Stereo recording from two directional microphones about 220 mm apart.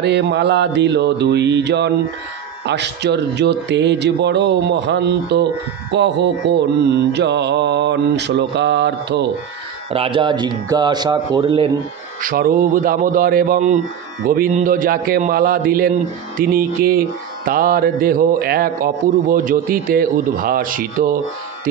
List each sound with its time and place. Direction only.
0.0 s a man's voice: 50° right (ahead or behind)
9.8 s speech: 25° right (ahead or behind)
12.2 s a man's voice: 40° right (ahead or behind)